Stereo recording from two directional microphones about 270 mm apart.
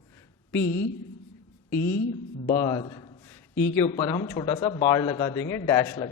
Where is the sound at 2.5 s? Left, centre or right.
Centre.